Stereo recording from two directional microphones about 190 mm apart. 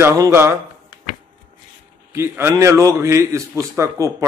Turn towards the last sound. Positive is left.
turn(degrees=-15)  # may be behind; listen again after turning